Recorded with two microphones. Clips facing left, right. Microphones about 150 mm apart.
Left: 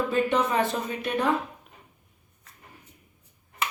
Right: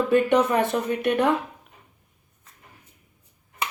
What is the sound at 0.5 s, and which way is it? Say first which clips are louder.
Speech: right 4 dB; 60° right (ahead or behind).